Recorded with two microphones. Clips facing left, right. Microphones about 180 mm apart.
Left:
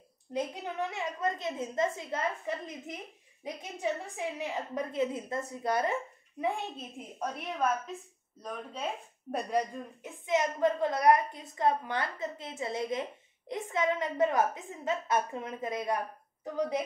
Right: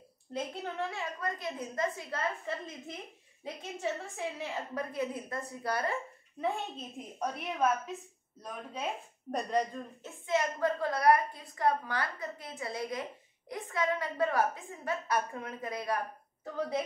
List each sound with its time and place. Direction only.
0.3 s a woman's voice: 15° left (ahead or behind)
6.4 s a woman's voice: 10° left (ahead or behind)
9.3 s a woman's voice: 10° left (ahead or behind)